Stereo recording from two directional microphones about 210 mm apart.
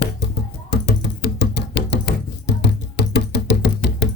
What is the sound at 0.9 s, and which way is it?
Music, 55° left (ahead or behind).